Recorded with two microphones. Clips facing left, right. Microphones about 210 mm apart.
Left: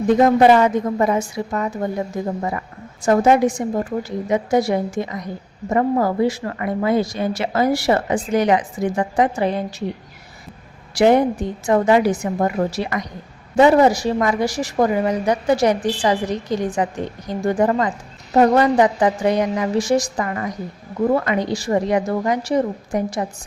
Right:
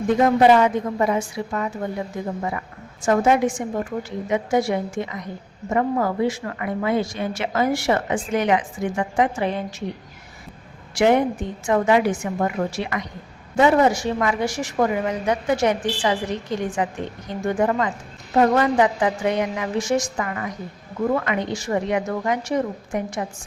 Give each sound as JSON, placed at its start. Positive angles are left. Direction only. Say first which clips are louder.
{"t": 0.2, "sound": "a woman's voice", "louder": "left 1 dB", "side_deg": 45}
{"t": 10.9, "sound": "a woman's voice", "louder": "left 3 dB", "side_deg": 35}